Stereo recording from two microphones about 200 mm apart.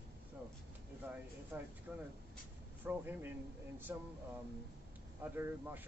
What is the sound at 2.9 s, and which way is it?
Speech, 10° right (ahead or behind).